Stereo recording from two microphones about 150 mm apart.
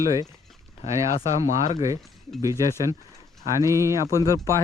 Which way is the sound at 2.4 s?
20° right (ahead or behind).